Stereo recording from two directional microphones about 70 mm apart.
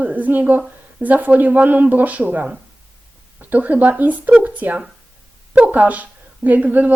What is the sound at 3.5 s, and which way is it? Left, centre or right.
A woman's voice, right.